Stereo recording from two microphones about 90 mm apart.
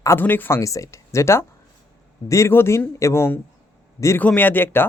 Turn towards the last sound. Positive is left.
turn(degrees=25)  # may be behind; listen again after turning